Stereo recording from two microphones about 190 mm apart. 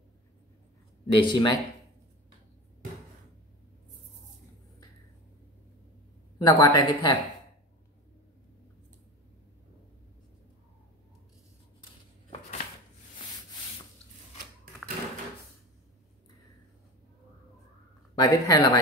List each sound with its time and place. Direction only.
1.0 s speech: 25° left (ahead or behind)
6.3 s speech: 20° left (ahead or behind)
18.1 s speech: 20° left (ahead or behind)